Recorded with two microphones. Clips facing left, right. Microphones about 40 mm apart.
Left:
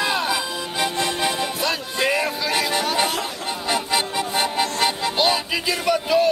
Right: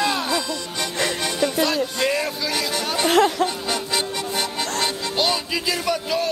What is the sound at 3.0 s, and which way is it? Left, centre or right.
Music, right.